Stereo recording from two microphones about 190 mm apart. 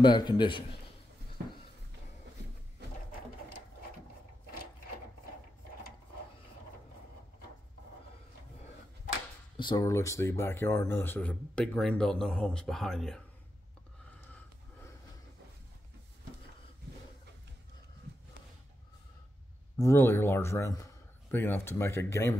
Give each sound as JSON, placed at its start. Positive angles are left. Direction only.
{"t": 0.0, "sound": "a man's voice", "side_deg": 20}
{"t": 9.6, "sound": "speech", "side_deg": 25}
{"t": 19.8, "sound": "speech", "side_deg": 15}